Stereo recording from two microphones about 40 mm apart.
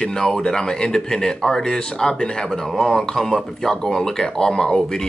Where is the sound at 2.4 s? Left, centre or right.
Centre.